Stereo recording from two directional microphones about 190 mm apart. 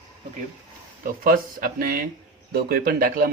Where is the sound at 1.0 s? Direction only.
50° right (ahead or behind).